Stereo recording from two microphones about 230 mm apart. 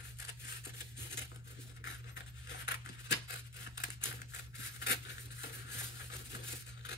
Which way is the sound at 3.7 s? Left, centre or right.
Left.